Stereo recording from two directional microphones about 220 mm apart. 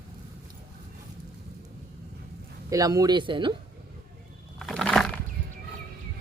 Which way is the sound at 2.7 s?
15° right (ahead or behind).